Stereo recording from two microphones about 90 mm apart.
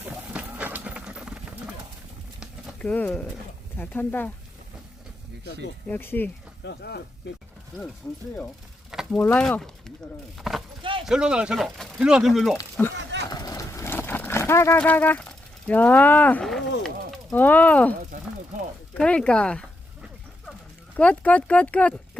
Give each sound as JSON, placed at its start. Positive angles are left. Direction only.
{"t": 0.0, "sound": "a sound", "side_deg": -20}
{"t": 2.7, "sound": "speech", "side_deg": 15}
{"t": 5.9, "sound": "speech", "side_deg": 25}
{"t": 7.7, "sound": "speech", "side_deg": 0}
{"t": 9.1, "sound": "speech", "side_deg": 20}
{"t": 9.4, "sound": "speech", "side_deg": 5}
{"t": 12.8, "sound": "speech", "side_deg": 20}
{"t": 13.3, "sound": "a sound", "side_deg": 50}
{"t": 13.7, "sound": "a sound", "side_deg": 25}
{"t": 14.8, "sound": "speech", "side_deg": 20}
{"t": 16.4, "sound": "speech", "side_deg": 5}
{"t": 17.3, "sound": "speech", "side_deg": 20}
{"t": 18.9, "sound": "speech", "side_deg": 10}
{"t": 20.9, "sound": "speech", "side_deg": 15}